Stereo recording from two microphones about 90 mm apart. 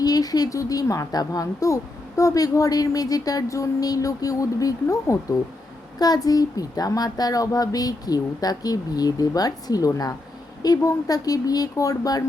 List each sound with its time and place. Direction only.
0.0 s a woman's voice: 45° left (ahead or behind)